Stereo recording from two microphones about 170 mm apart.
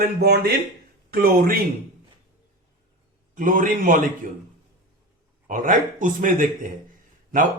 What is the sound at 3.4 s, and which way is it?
Speech, 55° right (ahead or behind).